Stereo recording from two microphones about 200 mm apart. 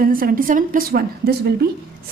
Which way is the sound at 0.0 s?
45° right (ahead or behind).